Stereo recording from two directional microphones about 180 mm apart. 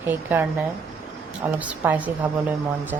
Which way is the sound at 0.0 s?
10° right (ahead or behind).